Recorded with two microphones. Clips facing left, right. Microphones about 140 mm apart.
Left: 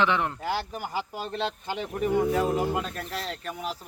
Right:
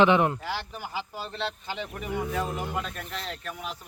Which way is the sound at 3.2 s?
Centre (ahead or behind).